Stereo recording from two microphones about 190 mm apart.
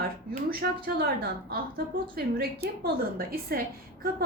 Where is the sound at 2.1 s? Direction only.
55° right (ahead or behind).